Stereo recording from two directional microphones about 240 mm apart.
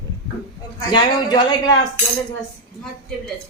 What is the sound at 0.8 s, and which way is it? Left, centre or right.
Speech, centre.